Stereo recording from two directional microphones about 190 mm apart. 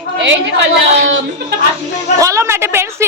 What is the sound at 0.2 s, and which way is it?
Speech, 70° right (ahead or behind).